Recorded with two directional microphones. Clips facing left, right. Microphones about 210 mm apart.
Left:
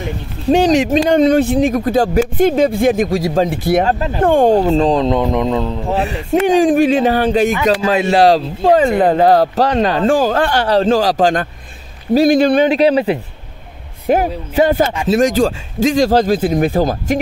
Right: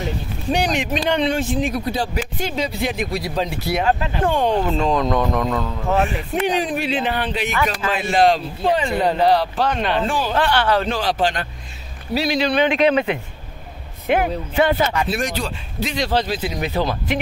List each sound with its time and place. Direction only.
0.6 s speech: 40° left (ahead or behind)